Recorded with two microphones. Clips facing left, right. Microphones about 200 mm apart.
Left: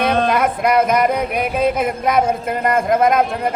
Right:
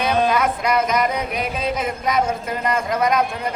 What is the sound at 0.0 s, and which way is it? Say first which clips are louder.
Music: left 2 dB; 55° left (ahead or behind).